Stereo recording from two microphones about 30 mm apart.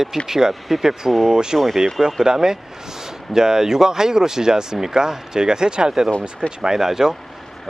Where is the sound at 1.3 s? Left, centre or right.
Right.